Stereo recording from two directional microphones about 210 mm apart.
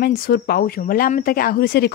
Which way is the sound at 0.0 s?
45° left (ahead or behind).